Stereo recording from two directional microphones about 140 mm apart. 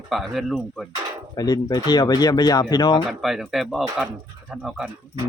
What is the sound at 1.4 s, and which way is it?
Speech, 25° left (ahead or behind).